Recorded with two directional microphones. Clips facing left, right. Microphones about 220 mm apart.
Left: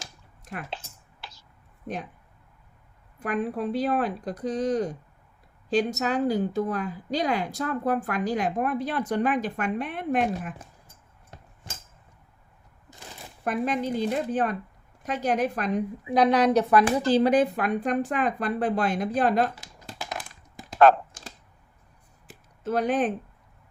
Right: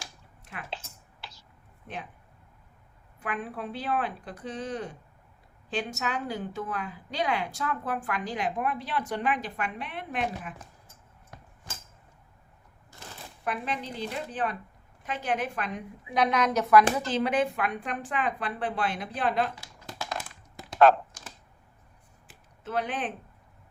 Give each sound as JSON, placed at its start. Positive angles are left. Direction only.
{"t": 0.4, "sound": "speech", "side_deg": 45}
{"t": 1.2, "sound": "a sound", "side_deg": 50}
{"t": 3.2, "sound": "a woman's voice", "side_deg": 40}
{"t": 13.4, "sound": "a woman's voice", "side_deg": 45}
{"t": 20.7, "sound": "computer keyboard", "side_deg": 50}
{"t": 22.3, "sound": "a sound", "side_deg": 40}